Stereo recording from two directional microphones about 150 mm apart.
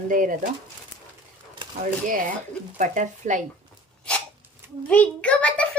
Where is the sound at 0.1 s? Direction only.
65° right (ahead or behind).